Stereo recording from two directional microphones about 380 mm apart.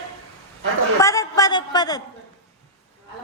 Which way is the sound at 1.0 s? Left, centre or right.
Centre.